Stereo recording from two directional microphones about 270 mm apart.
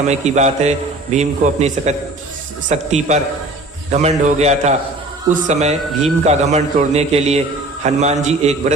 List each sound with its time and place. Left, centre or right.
0.1 s a man's voice: right